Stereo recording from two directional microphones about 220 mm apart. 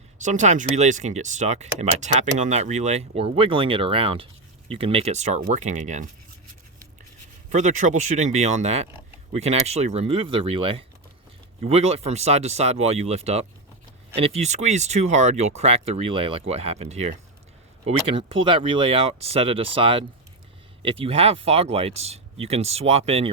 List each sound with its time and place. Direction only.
0.2 s speech: 35° right (ahead or behind)
7.5 s speech: 35° right (ahead or behind)